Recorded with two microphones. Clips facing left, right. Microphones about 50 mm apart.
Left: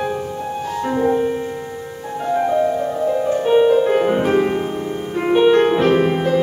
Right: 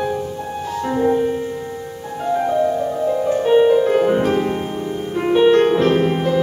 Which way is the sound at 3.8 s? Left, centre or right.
Centre.